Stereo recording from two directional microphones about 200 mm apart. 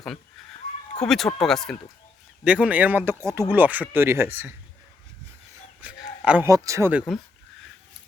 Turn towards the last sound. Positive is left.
turn(degrees=-10)  # may be behind; listen again after turning